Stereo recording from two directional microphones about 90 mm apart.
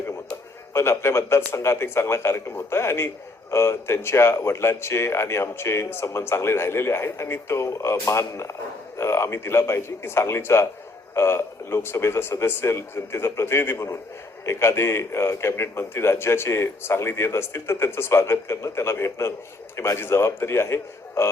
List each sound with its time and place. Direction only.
0.7 s speech: 30° left (ahead or behind)